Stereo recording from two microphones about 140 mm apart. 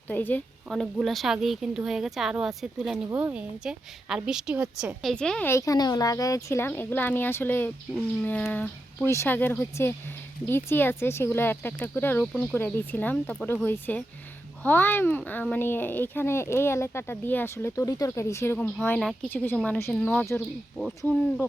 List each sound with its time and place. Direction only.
0.1 s speech: 10° left (ahead or behind)
0.7 s speech: centre (ahead or behind)
3.1 s a woman's voice: 15° right (ahead or behind)
5.0 s speech: 5° left (ahead or behind)
5.5 s speech: 20° left (ahead or behind)
12.2 s speech: 5° left (ahead or behind)
12.5 s speech: 15° left (ahead or behind)